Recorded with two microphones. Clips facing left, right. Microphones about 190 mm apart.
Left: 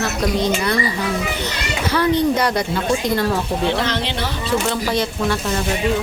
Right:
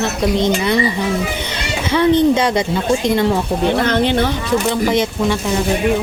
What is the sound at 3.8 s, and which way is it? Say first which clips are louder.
Speech: right 7 dB; 50° right (ahead or behind).